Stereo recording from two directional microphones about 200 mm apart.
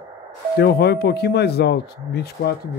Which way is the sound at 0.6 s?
55° left (ahead or behind).